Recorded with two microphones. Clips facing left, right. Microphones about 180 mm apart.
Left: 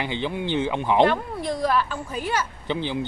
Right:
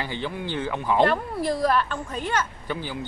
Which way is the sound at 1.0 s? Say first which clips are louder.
Left 1 dB; centre (ahead or behind).